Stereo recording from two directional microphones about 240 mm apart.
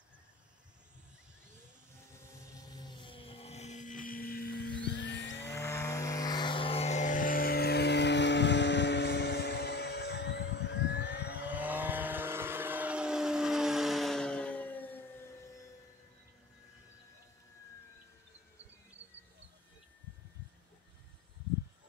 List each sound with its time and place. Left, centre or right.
2.5 s a sound: centre; by 5.3 s left
5.4 s music: centre; by 11.4 s left
11.4 s vehicle: centre